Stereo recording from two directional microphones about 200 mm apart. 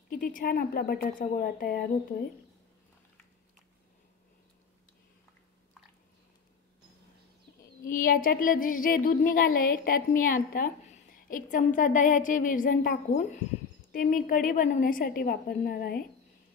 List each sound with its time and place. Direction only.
0.1 s speech: 45° left (ahead or behind)
7.8 s a woman's voice: 45° left (ahead or behind)